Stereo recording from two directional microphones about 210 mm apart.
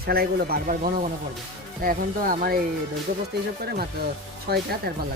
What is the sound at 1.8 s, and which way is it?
Speech, 40° right (ahead or behind).